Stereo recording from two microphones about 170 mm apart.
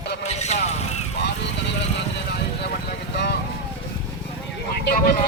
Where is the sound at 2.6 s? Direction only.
70° left (ahead or behind).